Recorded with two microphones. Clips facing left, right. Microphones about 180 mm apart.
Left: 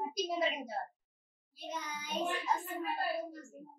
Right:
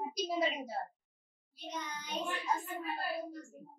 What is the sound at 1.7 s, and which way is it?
Child singing, 5° left (ahead or behind).